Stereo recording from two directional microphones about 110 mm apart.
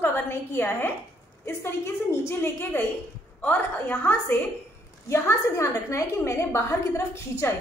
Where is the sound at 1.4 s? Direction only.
25° left (ahead or behind).